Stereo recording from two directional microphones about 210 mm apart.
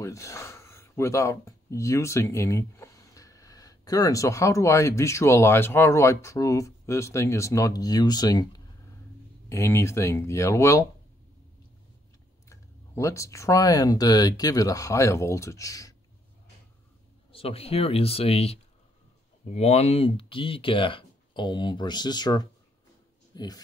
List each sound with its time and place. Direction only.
0.0 s speech: 15° left (ahead or behind)
12.4 s speech: 15° left (ahead or behind)
17.3 s speech: 25° left (ahead or behind)